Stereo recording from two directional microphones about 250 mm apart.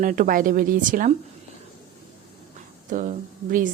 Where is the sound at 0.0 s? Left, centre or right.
Right.